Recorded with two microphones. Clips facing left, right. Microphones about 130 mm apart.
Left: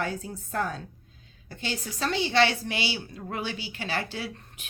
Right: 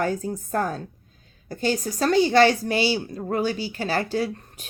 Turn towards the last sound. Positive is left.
turn(degrees=-40)  # may be behind; listen again after turning